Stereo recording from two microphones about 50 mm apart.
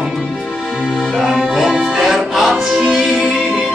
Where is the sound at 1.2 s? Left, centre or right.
Centre.